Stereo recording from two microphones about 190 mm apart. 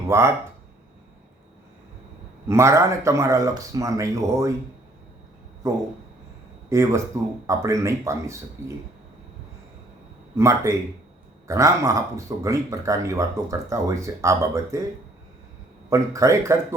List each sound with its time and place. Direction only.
0.1 s speech: 15° right (ahead or behind)
2.5 s speech: 15° right (ahead or behind)
6.7 s speech: 15° right (ahead or behind)
10.3 s speech: 15° right (ahead or behind)
15.9 s speech: 15° right (ahead or behind)